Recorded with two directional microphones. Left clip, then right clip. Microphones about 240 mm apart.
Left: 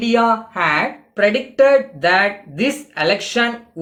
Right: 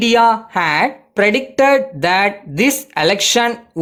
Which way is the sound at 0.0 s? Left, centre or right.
Right.